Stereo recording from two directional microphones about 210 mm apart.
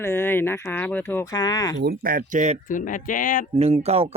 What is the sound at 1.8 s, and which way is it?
Speech, 45° right (ahead or behind).